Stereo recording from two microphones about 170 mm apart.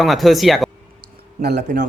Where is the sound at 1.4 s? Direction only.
70° right (ahead or behind).